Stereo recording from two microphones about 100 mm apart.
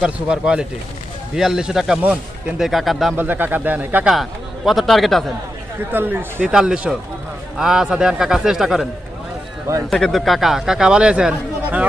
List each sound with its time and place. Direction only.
0.0 s speech: 10° right (ahead or behind)
2.6 s speech: centre (ahead or behind)
3.2 s speech: 20° right (ahead or behind)
4.1 s speech: centre (ahead or behind)
5.9 s speech: 20° right (ahead or behind)
6.5 s speech: 10° right (ahead or behind)
9.9 s speech: centre (ahead or behind)